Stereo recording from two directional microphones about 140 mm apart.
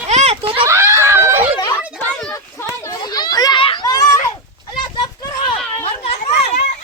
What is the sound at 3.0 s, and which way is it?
Children playing, 30° left (ahead or behind).